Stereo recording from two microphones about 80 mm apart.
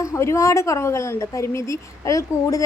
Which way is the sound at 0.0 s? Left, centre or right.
Left.